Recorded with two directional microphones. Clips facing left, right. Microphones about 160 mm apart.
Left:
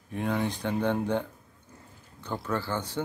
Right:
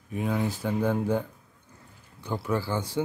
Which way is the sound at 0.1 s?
5° right (ahead or behind).